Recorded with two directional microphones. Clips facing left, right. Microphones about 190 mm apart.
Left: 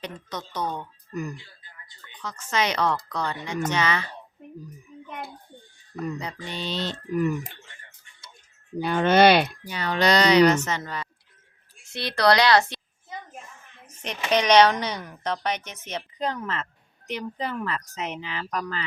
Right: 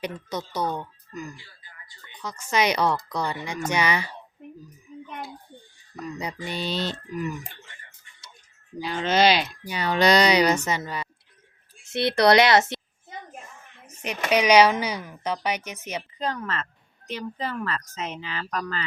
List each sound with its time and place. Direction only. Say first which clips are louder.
0.0 s speech: right 4 dB; 10° right (ahead or behind)
1.1 s speech: left 5 dB; 60° left (ahead or behind)
2.1 s speech: right 2 dB; 10° right (ahead or behind)
6.1 s speech: right 2 dB; 15° right (ahead or behind)
6.9 s speech: left 6 dB; 55° left (ahead or behind)
8.8 s speech: left 4 dB; 55° left (ahead or behind)
9.6 s speech: right 2 dB; 10° right (ahead or behind)
13.8 s speech: right 2 dB; 10° right (ahead or behind)
16.1 s speech: left 1 dB; 15° left (ahead or behind)